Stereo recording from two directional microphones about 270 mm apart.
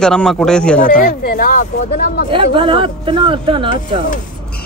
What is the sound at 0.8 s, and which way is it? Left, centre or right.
Speech, left.